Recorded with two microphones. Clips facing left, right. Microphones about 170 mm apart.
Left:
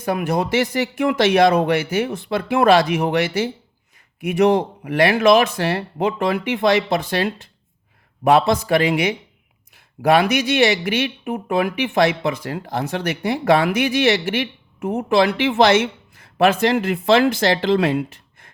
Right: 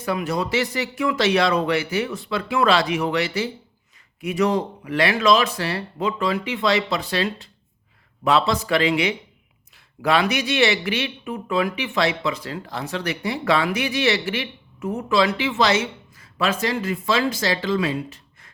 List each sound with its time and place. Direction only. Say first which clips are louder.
0.0 s speech: left 3 dB; 50° left (ahead or behind)